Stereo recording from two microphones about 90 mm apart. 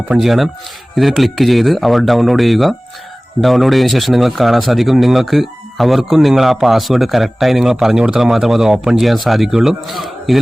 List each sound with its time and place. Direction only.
0.1 s speech: centre (ahead or behind)